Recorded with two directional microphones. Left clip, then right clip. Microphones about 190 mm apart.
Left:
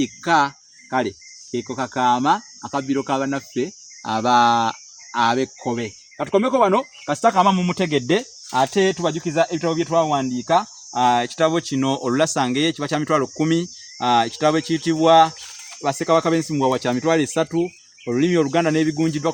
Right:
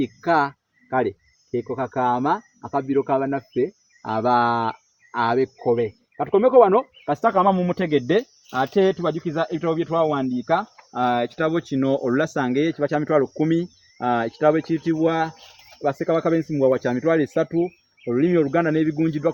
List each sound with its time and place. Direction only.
0.0 s cricket: 20° left (ahead or behind)
1.5 s speech: 25° left (ahead or behind)
15.8 s speech: 35° left (ahead or behind)